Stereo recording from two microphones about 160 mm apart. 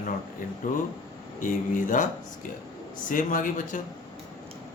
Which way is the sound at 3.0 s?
55° left (ahead or behind).